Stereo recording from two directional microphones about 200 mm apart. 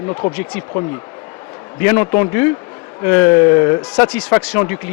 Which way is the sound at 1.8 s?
10° left (ahead or behind).